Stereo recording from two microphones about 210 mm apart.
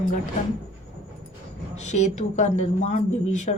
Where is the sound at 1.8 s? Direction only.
35° left (ahead or behind).